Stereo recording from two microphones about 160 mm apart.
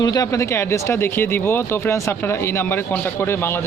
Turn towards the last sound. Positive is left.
turn(degrees=15)  # may be behind; listen again after turning